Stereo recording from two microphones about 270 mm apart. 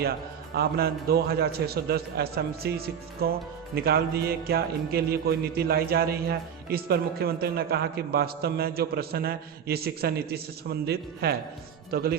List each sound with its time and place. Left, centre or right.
0.5 s music: right
11.9 s speech: right